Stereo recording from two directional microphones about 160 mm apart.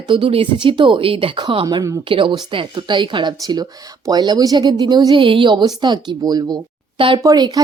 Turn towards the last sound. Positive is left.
turn(degrees=-25)  # may be behind; listen again after turning